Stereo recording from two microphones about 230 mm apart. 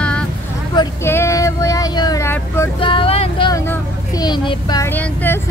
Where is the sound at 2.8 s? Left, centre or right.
Left.